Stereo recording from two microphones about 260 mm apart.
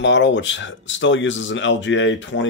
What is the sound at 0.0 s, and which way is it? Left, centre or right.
Speech, left.